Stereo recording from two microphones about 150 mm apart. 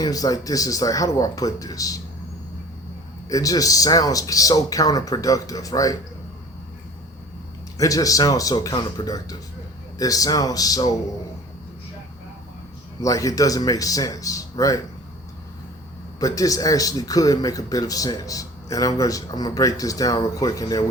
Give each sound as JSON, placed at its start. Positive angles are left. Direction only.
{"t": 0.0, "sound": "speech", "side_deg": 25}
{"t": 3.2, "sound": "speech", "side_deg": 25}
{"t": 7.8, "sound": "speech", "side_deg": 25}
{"t": 13.0, "sound": "speech", "side_deg": 20}
{"t": 16.2, "sound": "speech", "side_deg": 25}